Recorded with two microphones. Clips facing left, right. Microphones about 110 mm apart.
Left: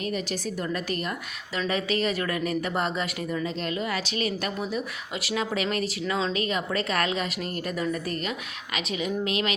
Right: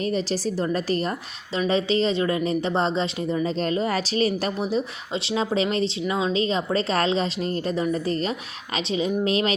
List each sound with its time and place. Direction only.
0.0 s a woman's voice: 30° right (ahead or behind)